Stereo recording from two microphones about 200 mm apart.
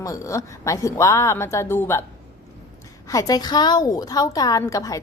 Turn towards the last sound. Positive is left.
turn(degrees=15)  # may be behind; listen again after turning